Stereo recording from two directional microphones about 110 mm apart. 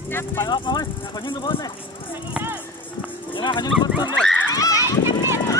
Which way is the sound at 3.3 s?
45° left (ahead or behind).